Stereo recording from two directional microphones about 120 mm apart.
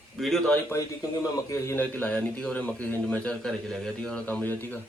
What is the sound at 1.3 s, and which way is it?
A man's voice, 25° left (ahead or behind).